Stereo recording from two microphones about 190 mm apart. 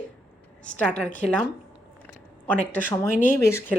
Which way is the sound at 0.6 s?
5° left (ahead or behind).